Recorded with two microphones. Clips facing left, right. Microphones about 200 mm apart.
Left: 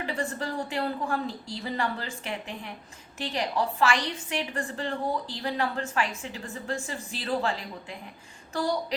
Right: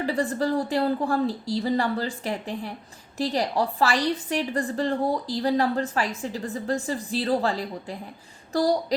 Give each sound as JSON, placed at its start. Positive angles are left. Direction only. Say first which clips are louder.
{"t": 0.0, "sound": "a woman's voice", "louder": "right 7 dB", "side_deg": -35}